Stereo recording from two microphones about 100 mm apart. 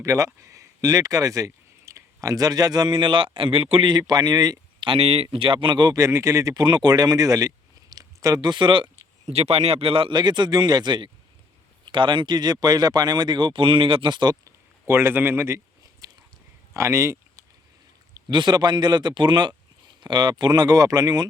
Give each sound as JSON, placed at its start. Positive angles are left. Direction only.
{"t": 0.0, "sound": "speech", "side_deg": -35}
{"t": 4.8, "sound": "speech", "side_deg": -70}
{"t": 6.0, "sound": "speech", "side_deg": -30}
{"t": 9.2, "sound": "speech", "side_deg": -90}
{"t": 14.4, "sound": "a sound", "side_deg": -25}
{"t": 16.7, "sound": "speech", "side_deg": -30}
{"t": 18.1, "sound": "speech", "side_deg": -50}